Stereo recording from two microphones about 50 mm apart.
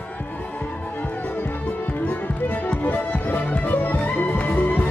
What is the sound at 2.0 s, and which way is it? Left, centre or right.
Music, left.